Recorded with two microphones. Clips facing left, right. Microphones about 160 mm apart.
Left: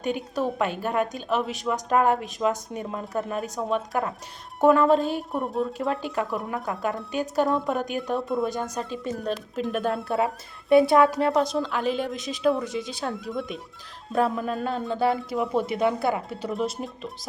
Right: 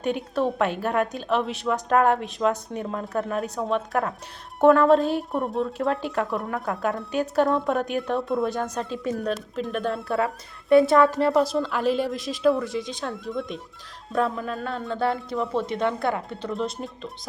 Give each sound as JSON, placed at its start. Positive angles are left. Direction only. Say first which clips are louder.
{"t": 0.0, "sound": "a woman's voice", "louder": "right 2 dB", "side_deg": 0}
{"t": 10.2, "sound": "speech", "louder": "even", "side_deg": 20}
{"t": 10.9, "sound": "a woman's voice", "louder": "right 1 dB", "side_deg": 0}